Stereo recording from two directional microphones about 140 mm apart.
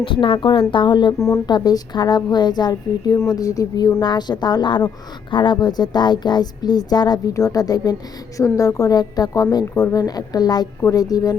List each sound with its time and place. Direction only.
0.0 s a woman's voice: 40° left (ahead or behind)